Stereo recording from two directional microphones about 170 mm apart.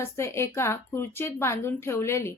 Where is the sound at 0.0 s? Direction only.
15° left (ahead or behind).